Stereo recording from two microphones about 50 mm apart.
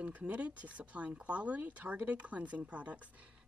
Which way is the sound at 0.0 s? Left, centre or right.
Right.